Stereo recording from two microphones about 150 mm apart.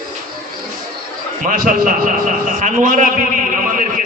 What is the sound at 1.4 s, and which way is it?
A man's voice, 65° right (ahead or behind).